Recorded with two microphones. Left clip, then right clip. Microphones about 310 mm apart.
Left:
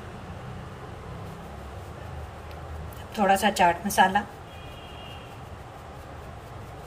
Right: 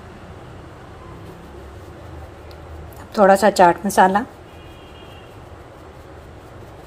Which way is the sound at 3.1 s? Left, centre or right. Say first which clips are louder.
Right 9 dB; centre.